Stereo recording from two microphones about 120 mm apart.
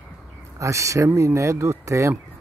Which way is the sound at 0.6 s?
25° right (ahead or behind).